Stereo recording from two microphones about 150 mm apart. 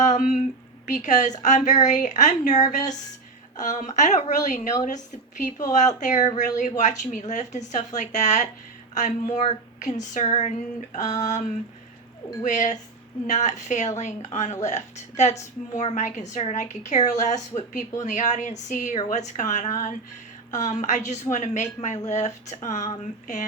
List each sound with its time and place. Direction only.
0.0 s a sound: 55° left (ahead or behind)
0.9 s a woman's voice: 55° left (ahead or behind)
12.4 s a woman's voice: 55° left (ahead or behind)